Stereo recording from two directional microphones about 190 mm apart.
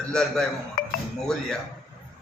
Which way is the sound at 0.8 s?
50° left (ahead or behind).